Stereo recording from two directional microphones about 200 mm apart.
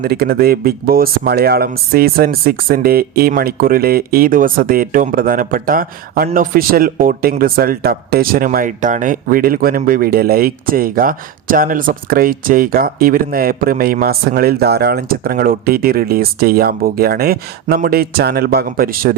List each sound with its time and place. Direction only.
0.0 s speech: 50° right (ahead or behind)